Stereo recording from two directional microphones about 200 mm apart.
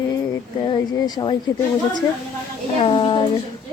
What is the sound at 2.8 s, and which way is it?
Speech, 25° left (ahead or behind).